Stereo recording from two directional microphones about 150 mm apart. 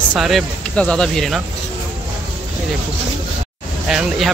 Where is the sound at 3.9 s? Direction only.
Centre (ahead or behind).